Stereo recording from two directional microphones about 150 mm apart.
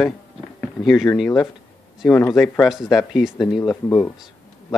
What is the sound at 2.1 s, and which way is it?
Speech, 15° left (ahead or behind).